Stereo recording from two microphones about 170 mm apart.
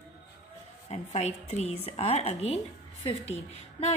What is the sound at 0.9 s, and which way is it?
A woman's voice, 40° left (ahead or behind).